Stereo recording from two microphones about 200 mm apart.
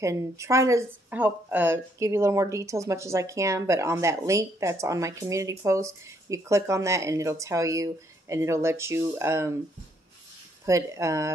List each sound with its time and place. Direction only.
0.0 s speech: 15° right (ahead or behind)
10.6 s speech: 15° right (ahead or behind)